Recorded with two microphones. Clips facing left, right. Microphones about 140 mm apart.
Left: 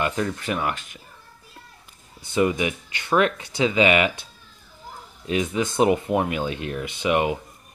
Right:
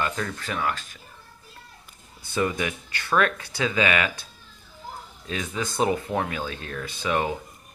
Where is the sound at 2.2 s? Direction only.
20° left (ahead or behind).